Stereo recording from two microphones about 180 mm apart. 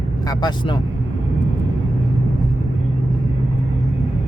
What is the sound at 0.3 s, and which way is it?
Speech, 25° left (ahead or behind).